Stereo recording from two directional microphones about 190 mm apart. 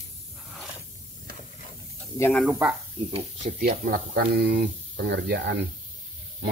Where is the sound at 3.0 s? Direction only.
30° right (ahead or behind).